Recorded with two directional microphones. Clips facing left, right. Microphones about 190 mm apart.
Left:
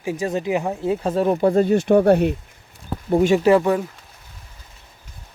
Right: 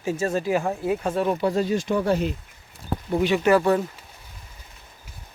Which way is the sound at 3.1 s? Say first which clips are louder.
Left 6 dB; 45° left (ahead or behind).